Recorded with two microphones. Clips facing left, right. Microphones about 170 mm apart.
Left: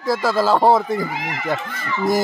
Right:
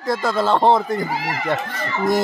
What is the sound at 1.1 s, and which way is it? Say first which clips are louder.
Speech: right 3 dB; 35° right (ahead or behind).